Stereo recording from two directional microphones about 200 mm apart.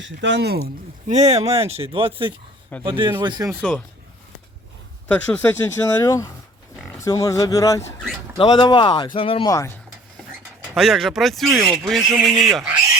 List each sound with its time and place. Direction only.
0.0 s speech: 60° right (ahead or behind)
1.0 s speech: 35° right (ahead or behind)
5.0 s speech: 5° left (ahead or behind)
10.8 s speech: centre (ahead or behind)